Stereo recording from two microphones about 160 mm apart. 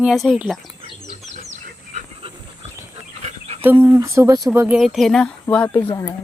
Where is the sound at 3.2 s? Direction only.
45° right (ahead or behind).